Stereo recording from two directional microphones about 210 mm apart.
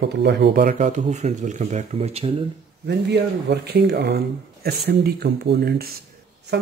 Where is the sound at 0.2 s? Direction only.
55° right (ahead or behind).